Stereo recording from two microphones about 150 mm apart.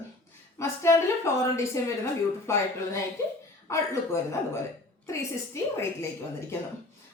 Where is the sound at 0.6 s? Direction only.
20° left (ahead or behind).